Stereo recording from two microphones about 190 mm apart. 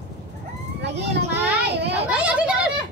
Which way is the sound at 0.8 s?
65° right (ahead or behind).